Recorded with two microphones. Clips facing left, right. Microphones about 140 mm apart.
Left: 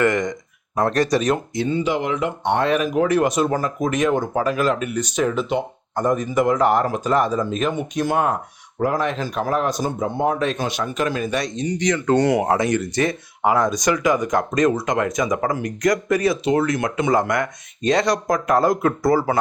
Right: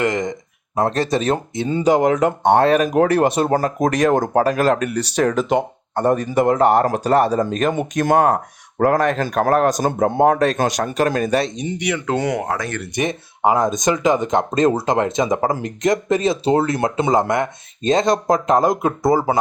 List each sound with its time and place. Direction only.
0.0 s speech: 20° right (ahead or behind)
1.7 s speech: 40° right (ahead or behind)
5.9 s speech: 65° right (ahead or behind)
6.7 s speech: 65° right (ahead or behind)
7.5 s speech: 45° right (ahead or behind)
10.4 s speech: 40° right (ahead or behind)
11.4 s speech: 25° right (ahead or behind)
11.8 s speech: 5° right (ahead or behind)
12.5 s speech: 20° left (ahead or behind)
13.0 s speech: 20° right (ahead or behind)